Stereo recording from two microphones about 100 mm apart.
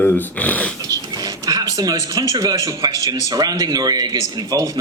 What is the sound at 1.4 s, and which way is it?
Speech, 40° right (ahead or behind).